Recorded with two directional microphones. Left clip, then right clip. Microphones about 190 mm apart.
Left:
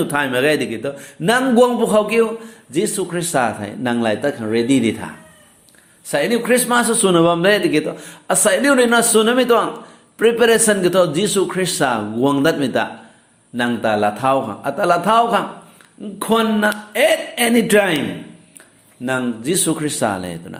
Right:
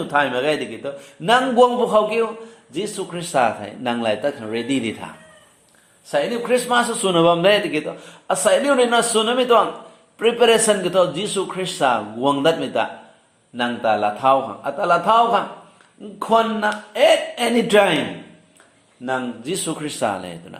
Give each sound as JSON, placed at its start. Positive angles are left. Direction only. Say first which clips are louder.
{"t": 0.0, "sound": "a man's voice", "louder": "left 2 dB", "side_deg": 30}
{"t": 19.0, "sound": "a man's voice", "louder": "left 4 dB", "side_deg": 25}